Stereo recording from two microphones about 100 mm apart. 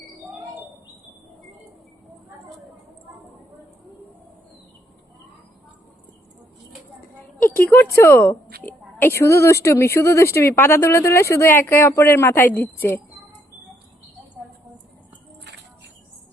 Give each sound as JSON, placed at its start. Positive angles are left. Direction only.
{"t": 7.3, "sound": "a woman's voice", "side_deg": 20}